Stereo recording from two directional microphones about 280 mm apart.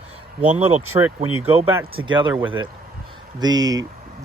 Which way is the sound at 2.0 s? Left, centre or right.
Centre.